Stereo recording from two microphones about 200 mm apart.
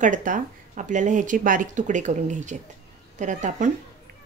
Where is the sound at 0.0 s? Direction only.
40° right (ahead or behind).